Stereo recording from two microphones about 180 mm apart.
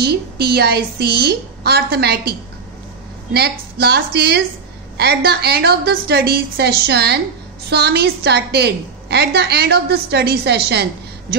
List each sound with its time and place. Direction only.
0.0 s a woman's voice: 60° right (ahead or behind)
3.3 s a woman's voice: 60° right (ahead or behind)